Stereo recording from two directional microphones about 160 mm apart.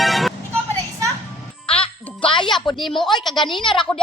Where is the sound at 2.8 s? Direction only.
Centre (ahead or behind).